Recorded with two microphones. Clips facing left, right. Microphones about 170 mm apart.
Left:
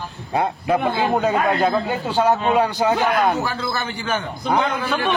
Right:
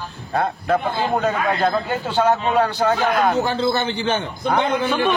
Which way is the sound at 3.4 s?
25° right (ahead or behind).